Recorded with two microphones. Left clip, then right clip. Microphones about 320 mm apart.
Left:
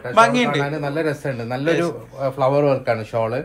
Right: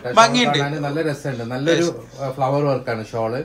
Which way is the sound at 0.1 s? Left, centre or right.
Centre.